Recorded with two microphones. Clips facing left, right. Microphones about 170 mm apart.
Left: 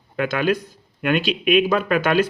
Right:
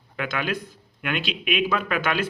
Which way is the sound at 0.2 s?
45° left (ahead or behind).